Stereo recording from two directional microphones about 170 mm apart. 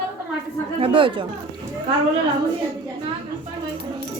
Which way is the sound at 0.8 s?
30° right (ahead or behind).